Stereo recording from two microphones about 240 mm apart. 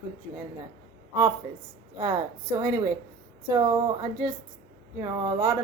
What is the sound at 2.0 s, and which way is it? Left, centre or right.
A woman's voice, centre.